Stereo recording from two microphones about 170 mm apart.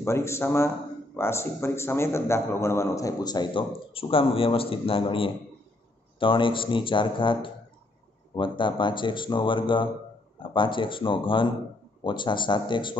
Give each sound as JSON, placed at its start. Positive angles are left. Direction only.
{"t": 0.0, "sound": "a man's voice", "side_deg": 15}